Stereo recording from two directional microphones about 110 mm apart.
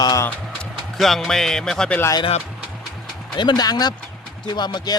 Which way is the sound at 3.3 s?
40° left (ahead or behind).